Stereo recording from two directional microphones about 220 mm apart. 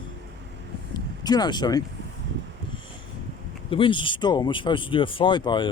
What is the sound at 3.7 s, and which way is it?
Speech, 25° left (ahead or behind).